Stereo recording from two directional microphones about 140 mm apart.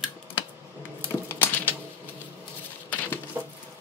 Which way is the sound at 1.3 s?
15° left (ahead or behind).